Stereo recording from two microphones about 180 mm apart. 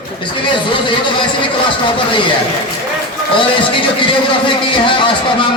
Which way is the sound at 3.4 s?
25° left (ahead or behind).